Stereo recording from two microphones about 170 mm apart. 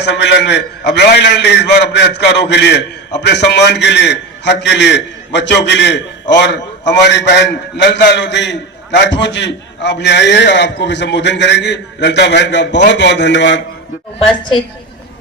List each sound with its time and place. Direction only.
0.0 s a man's voice: 80° left